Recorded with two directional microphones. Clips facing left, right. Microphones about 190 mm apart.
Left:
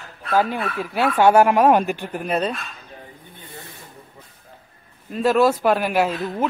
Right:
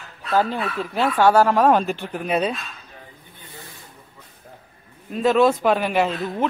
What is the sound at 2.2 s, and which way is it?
Speech, 5° right (ahead or behind).